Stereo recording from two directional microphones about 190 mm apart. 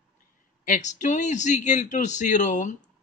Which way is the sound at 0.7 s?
40° left (ahead or behind).